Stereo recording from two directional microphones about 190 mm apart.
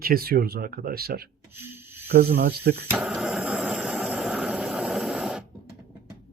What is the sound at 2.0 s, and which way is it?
Speech, 55° right (ahead or behind).